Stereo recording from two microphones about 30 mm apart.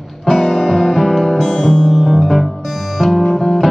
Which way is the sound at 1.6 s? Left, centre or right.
Centre.